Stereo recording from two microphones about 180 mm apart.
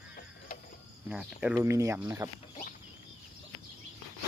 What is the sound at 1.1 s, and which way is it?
Speech, 5° right (ahead or behind).